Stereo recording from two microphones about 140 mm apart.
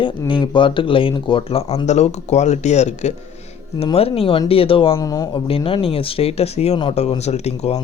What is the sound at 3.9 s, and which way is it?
Speech, 45° left (ahead or behind).